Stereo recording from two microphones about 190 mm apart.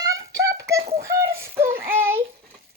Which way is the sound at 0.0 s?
15° right (ahead or behind).